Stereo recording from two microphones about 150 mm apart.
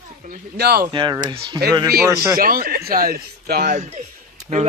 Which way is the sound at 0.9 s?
30° right (ahead or behind).